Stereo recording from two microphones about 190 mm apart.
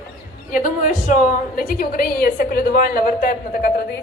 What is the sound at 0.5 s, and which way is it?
A woman's voice, 45° left (ahead or behind).